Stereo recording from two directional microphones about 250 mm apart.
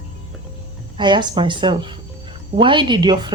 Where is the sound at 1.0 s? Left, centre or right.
Centre.